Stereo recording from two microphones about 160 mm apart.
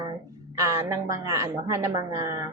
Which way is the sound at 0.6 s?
20° right (ahead or behind).